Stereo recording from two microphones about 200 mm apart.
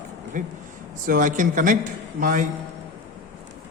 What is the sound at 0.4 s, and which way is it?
A man's voice, 40° right (ahead or behind).